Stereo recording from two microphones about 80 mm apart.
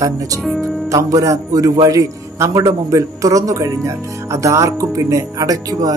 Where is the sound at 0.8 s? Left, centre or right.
Right.